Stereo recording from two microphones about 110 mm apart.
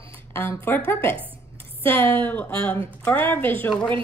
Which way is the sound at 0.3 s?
20° left (ahead or behind).